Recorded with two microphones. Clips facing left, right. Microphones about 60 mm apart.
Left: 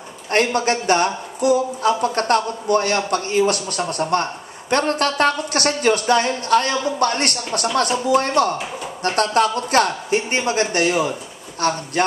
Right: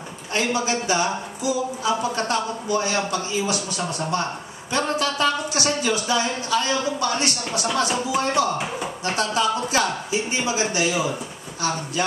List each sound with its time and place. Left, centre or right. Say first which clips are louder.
0.3 s a man's voice: left 5 dB; left